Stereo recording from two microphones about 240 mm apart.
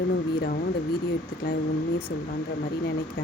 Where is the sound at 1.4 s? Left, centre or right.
Left.